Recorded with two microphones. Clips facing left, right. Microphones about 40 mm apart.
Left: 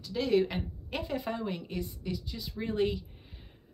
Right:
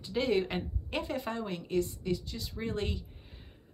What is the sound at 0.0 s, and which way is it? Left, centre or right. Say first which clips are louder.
Speech: left 2 dB; right.